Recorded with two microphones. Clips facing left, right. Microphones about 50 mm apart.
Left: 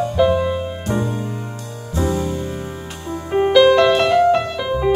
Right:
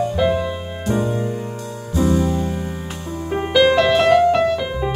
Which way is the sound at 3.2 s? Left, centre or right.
Centre.